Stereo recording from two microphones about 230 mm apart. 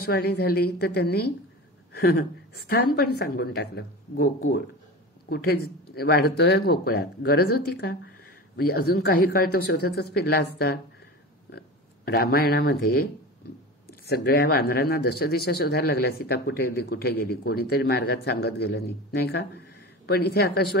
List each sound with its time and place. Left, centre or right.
0.0 s a woman's voice: left
5.3 s speech: left